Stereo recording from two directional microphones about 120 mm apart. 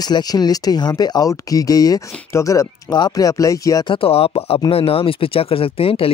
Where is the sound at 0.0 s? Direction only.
35° left (ahead or behind).